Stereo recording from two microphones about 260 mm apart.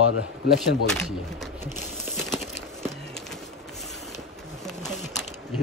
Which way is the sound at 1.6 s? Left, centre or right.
Centre.